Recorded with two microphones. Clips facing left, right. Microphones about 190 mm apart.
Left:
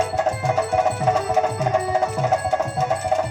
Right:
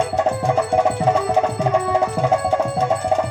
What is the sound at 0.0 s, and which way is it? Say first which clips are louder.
Music: right 2 dB; 30° right (ahead or behind).